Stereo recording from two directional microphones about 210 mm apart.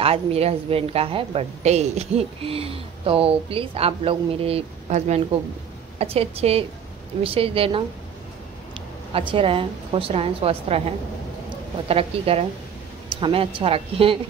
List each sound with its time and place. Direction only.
0.0 s a woman's voice: 30° right (ahead or behind)
9.3 s a woman's voice: 25° right (ahead or behind)
11.9 s a woman's voice: 25° right (ahead or behind)